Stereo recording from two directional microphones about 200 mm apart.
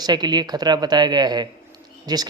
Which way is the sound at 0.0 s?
20° right (ahead or behind).